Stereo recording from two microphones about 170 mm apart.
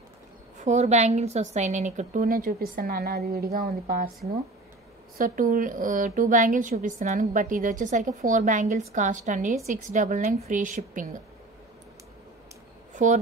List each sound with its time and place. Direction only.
0.7 s a woman's voice: 40° right (ahead or behind); by 4.1 s 60° right (ahead or behind)
5.1 s a woman's voice: 55° right (ahead or behind)
12.9 s speech: 50° right (ahead or behind)